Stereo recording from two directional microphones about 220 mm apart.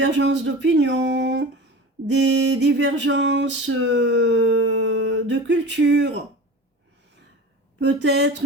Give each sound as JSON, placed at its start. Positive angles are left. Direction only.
{"t": 0.0, "sound": "speech", "side_deg": -55}
{"t": 2.0, "sound": "a sound", "side_deg": -55}
{"t": 7.8, "sound": "speech", "side_deg": -55}